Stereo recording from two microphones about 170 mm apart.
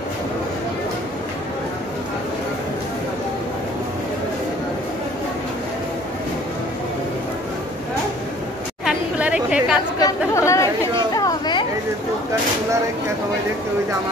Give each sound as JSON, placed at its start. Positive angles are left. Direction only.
{"t": 8.8, "sound": "chatter", "side_deg": -5}
{"t": 9.9, "sound": "speech", "side_deg": 20}
{"t": 11.1, "sound": "a sound", "side_deg": 25}